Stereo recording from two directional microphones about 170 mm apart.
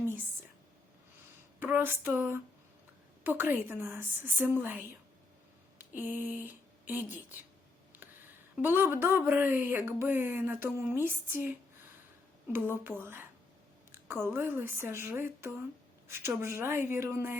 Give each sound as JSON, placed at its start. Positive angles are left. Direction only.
{"t": 1.5, "sound": "speech", "side_deg": -10}
{"t": 8.6, "sound": "speech", "side_deg": -15}
{"t": 12.8, "sound": "a woman's voice", "side_deg": -10}